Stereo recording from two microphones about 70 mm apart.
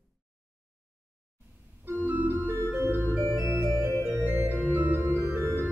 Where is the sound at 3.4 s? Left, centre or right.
Right.